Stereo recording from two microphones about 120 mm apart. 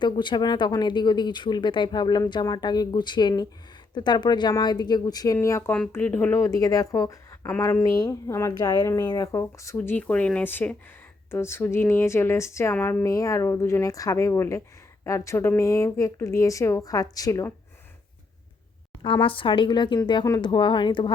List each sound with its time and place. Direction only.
0.0 s speech: 40° left (ahead or behind)
9.7 s speech: 15° left (ahead or behind)
19.0 s a woman's voice: 45° left (ahead or behind)